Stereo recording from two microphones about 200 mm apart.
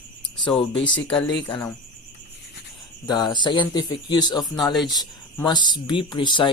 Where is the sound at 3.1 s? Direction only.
20° left (ahead or behind).